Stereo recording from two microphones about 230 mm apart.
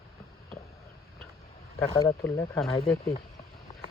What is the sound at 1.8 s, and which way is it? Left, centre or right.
Speech, centre.